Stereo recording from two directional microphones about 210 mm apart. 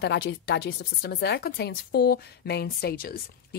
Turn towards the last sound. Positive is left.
turn(degrees=45)  # may be behind; listen again after turning